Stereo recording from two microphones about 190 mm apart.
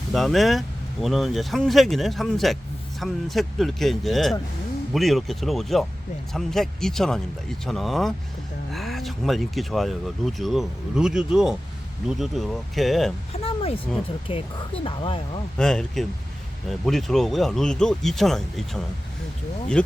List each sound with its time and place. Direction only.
0.1 s speech: centre (ahead or behind)
13.4 s a sound: 30° left (ahead or behind)
14.8 s speech: 25° left (ahead or behind)
15.5 s speech: 5° left (ahead or behind)